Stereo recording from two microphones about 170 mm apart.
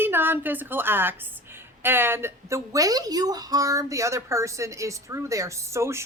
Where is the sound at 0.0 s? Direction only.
10° right (ahead or behind).